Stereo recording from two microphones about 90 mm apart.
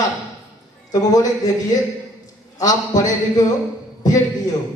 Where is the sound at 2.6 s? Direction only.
40° left (ahead or behind).